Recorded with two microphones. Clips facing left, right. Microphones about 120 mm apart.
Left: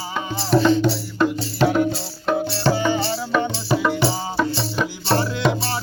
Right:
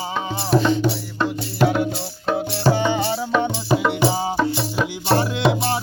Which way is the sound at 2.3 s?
10° right (ahead or behind).